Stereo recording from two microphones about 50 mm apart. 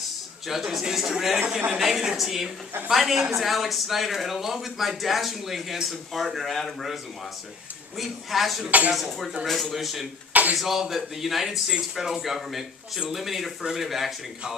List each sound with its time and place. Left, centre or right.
0.5 s a woman's voice: centre
8.0 s speech: centre
8.6 s speech: right
9.0 s speech: centre